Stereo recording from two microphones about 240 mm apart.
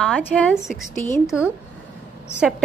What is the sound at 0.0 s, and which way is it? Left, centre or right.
A woman's voice, centre.